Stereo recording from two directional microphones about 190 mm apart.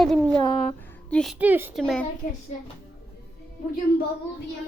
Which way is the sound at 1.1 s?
Centre (ahead or behind).